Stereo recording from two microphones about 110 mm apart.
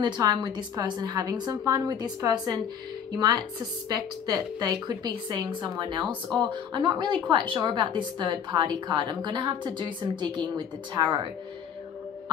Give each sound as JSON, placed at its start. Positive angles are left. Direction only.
{"t": 0.0, "sound": "a woman's voice", "side_deg": -40}